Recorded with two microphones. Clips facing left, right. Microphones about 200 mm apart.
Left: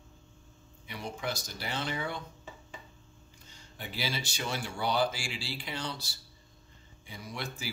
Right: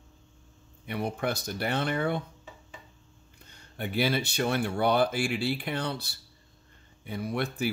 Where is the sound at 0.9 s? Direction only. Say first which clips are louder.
Right 7 dB; 60° right (ahead or behind).